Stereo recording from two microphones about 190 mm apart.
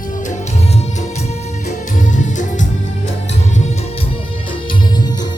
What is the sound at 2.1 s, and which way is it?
Music, 40° left (ahead or behind).